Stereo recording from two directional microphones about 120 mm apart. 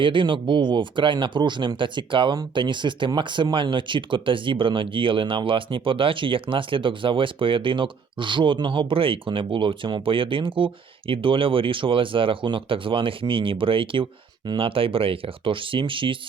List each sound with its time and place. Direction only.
0.0 s speech: 45° right (ahead or behind)